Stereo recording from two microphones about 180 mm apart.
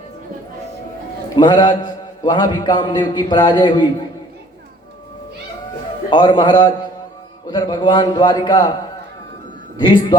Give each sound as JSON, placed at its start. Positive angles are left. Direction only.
{"t": 1.4, "sound": "a man's voice", "side_deg": 25}
{"t": 6.1, "sound": "a man's voice", "side_deg": 25}
{"t": 9.7, "sound": "a man's voice", "side_deg": 25}